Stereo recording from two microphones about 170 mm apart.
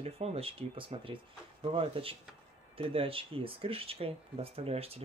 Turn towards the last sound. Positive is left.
turn(degrees=-35)  # may be behind; listen again after turning